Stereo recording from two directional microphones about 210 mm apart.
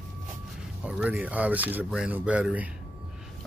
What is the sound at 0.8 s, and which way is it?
Speech, 5° right (ahead or behind).